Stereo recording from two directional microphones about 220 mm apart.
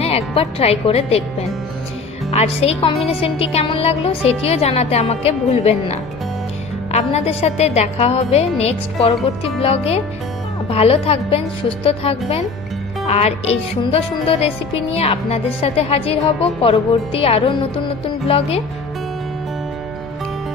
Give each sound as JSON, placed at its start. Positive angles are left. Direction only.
{"t": 0.0, "sound": "speech", "side_deg": 25}
{"t": 2.3, "sound": "speech", "side_deg": 25}